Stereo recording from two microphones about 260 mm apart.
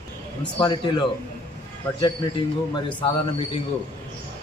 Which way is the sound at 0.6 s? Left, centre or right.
Centre.